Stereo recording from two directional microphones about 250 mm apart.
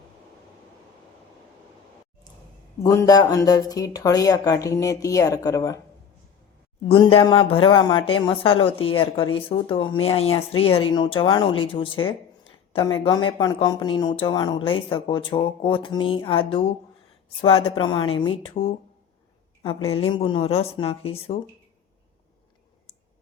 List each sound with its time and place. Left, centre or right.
2.8 s speech: centre
6.8 s speech: left
19.9 s speech: left